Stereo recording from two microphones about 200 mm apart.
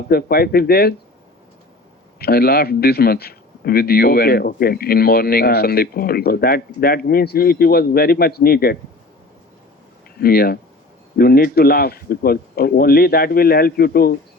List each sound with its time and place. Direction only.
0.1 s a man's voice: 50° left (ahead or behind)
2.1 s a man's voice: 50° left (ahead or behind)
10.2 s a man's voice: 50° left (ahead or behind)